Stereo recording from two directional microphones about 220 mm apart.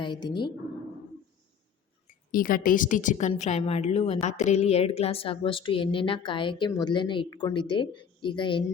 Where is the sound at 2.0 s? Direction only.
40° left (ahead or behind).